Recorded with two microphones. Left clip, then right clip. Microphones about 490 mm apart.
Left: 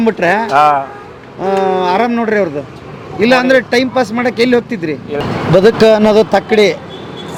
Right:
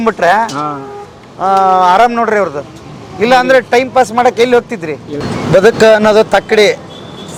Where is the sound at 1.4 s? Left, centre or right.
Right.